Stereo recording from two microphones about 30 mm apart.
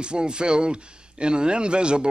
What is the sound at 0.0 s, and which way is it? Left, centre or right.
A man's voice, right.